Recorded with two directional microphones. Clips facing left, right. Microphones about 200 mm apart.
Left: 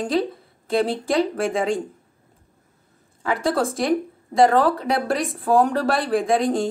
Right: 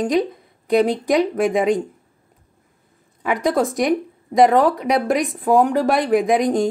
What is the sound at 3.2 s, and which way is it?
Speech, 20° right (ahead or behind).